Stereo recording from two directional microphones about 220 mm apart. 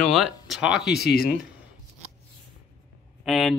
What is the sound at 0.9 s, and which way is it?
Speech, 45° left (ahead or behind).